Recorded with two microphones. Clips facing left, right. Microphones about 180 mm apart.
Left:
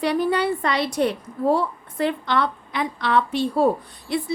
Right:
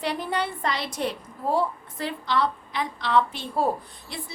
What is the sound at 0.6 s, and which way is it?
Speech, 65° left (ahead or behind).